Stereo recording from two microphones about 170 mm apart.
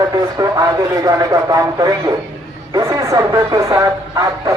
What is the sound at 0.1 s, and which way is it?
Speech, 20° right (ahead or behind).